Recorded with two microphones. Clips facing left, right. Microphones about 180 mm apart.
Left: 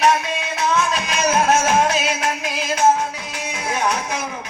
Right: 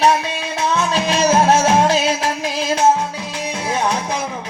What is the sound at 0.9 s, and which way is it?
Music, 30° right (ahead or behind).